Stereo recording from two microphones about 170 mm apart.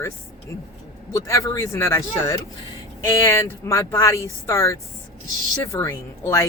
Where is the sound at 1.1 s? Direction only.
20° left (ahead or behind).